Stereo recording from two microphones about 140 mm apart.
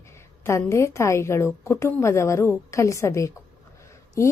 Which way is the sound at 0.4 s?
20° left (ahead or behind).